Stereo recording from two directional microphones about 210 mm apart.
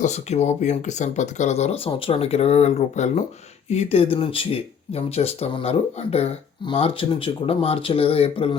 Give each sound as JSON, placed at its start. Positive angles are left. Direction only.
{"t": 0.0, "sound": "speech", "side_deg": 30}